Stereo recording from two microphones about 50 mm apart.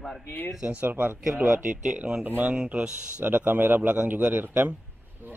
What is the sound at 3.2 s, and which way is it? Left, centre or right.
Speech, right.